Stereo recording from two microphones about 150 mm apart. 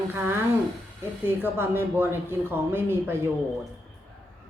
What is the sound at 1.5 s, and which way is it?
Speech, 15° right (ahead or behind).